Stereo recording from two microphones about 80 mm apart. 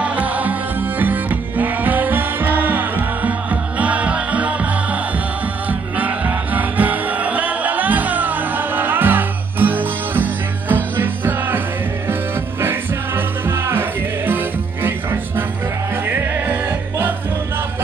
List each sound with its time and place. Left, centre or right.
0.0 s music: centre
5.7 s music: centre